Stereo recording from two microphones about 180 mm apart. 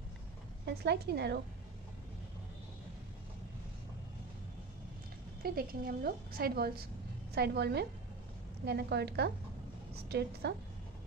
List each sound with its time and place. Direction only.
0.7 s a woman's voice: 70° right (ahead or behind)
5.4 s a woman's voice: 55° right (ahead or behind)